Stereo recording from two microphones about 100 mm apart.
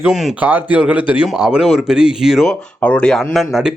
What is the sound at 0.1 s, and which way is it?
Speech, 5° right (ahead or behind).